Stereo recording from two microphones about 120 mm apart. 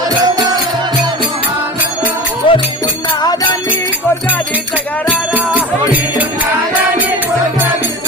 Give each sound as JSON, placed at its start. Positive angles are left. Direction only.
{"t": 2.4, "sound": "music", "side_deg": 45}
{"t": 5.3, "sound": "music", "side_deg": -15}